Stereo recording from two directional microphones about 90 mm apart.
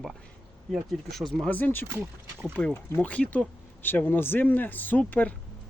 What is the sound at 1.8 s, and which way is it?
Speech, 30° right (ahead or behind).